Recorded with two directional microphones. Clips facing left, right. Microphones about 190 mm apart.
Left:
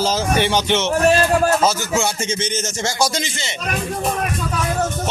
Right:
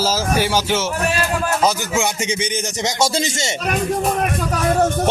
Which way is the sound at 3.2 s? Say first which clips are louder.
Right 5 dB; 45° right (ahead or behind).